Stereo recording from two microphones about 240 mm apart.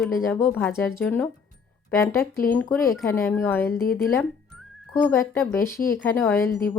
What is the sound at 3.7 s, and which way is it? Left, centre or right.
Speech, left.